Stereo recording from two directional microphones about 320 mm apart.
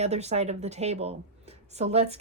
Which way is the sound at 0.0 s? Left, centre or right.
Centre.